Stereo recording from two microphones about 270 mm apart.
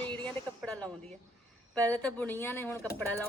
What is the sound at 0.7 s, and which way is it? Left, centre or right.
A woman's voice, centre.